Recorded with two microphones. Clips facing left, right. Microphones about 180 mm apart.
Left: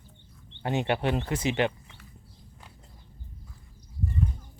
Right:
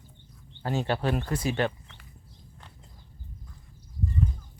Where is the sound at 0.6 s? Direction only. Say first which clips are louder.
Left 1 dB; 20° left (ahead or behind).